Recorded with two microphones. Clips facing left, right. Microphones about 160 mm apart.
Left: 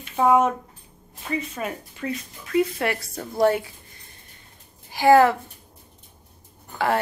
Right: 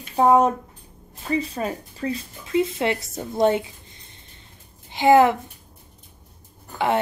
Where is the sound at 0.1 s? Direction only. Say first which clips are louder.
Right 2 dB; 35° right (ahead or behind); by 5.4 s 20° right (ahead or behind).